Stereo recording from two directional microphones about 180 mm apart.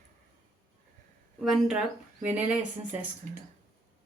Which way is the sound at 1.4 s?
Centre (ahead or behind).